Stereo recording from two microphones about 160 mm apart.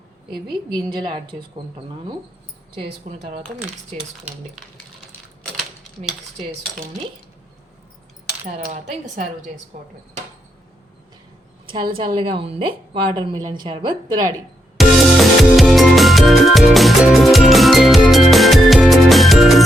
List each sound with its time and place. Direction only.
0.3 s a woman's voice: 30° right (ahead or behind)
2.8 s speech: 45° right (ahead or behind)
8.6 s speech: 50° right (ahead or behind)
11.9 s a woman's voice: 30° right (ahead or behind)
14.8 s music: centre (ahead or behind)